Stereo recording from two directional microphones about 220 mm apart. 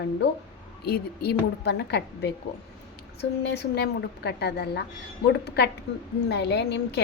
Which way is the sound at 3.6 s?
50° left (ahead or behind).